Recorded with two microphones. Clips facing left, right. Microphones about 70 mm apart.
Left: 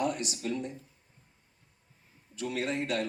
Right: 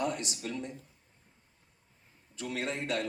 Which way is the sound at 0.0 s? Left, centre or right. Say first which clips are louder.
Left 2 dB; right.